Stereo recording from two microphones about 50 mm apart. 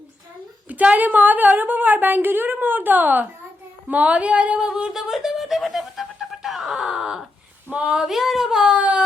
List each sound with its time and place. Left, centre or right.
0.7 s a woman's voice: right
4.9 s music: centre
7.7 s speech: right
8.0 s speech: centre
8.7 s speech: right